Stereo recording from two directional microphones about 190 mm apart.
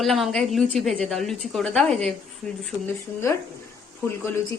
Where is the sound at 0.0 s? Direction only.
Centre (ahead or behind).